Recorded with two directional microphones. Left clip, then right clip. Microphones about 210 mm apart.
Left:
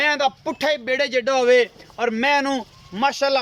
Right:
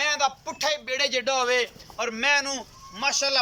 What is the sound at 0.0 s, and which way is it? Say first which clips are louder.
Speech: left 5 dB; 35° left (ahead or behind).